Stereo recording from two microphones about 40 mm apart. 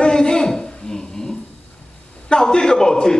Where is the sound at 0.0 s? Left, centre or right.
Centre.